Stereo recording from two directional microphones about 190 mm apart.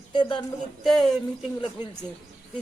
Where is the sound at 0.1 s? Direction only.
25° left (ahead or behind).